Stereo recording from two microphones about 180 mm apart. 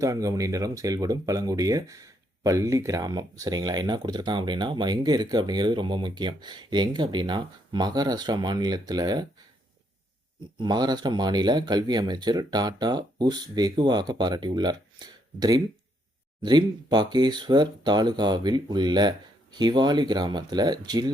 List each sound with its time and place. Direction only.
0.0 s speech: 20° right (ahead or behind)
10.4 s speech: 25° right (ahead or behind)